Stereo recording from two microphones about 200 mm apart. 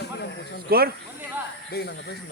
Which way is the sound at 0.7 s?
50° right (ahead or behind).